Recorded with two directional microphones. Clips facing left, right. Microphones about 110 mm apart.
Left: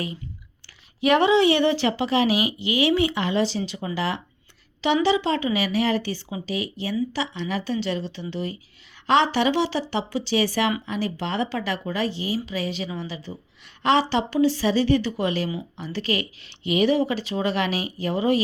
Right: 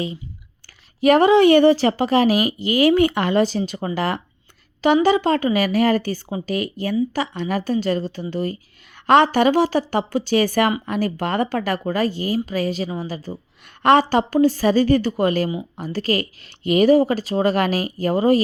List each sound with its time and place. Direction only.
1.0 s a woman's voice: 45° right (ahead or behind)